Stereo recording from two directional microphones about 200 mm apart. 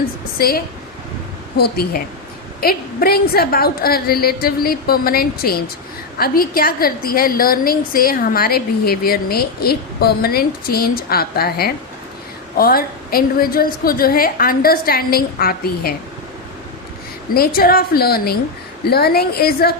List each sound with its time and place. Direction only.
0.3 s a woman's voice: 50° left (ahead or behind)
17.3 s a woman's voice: 50° left (ahead or behind)